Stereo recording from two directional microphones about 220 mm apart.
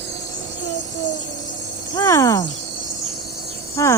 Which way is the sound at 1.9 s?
15° left (ahead or behind).